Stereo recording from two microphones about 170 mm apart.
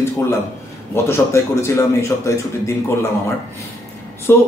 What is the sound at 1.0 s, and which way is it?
A man's voice, 15° left (ahead or behind).